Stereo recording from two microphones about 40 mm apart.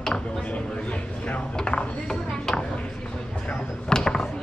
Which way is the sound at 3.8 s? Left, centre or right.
Centre.